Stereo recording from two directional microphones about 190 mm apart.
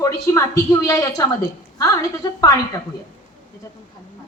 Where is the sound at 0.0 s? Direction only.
15° left (ahead or behind).